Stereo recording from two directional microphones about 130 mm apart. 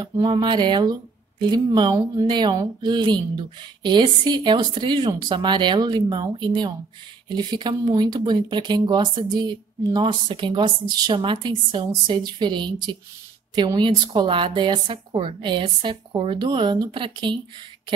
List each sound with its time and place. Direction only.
0.0 s speech: 35° right (ahead or behind)